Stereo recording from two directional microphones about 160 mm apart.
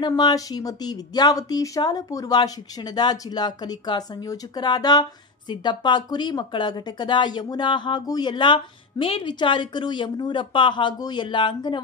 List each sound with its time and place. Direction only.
0.0 s speech: 25° left (ahead or behind)